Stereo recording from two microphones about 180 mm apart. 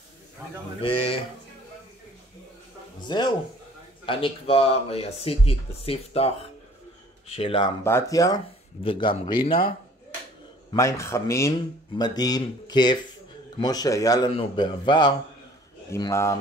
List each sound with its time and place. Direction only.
0.8 s speech: 30° left (ahead or behind)
3.0 s a sound: 25° left (ahead or behind)
4.0 s speech: 30° left (ahead or behind)
7.8 s speech: 15° left (ahead or behind)
8.8 s speech: 30° left (ahead or behind)
10.7 s speech: 15° left (ahead or behind)